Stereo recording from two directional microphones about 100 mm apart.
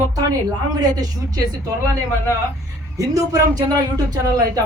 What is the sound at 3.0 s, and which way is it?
Speech, 35° right (ahead or behind).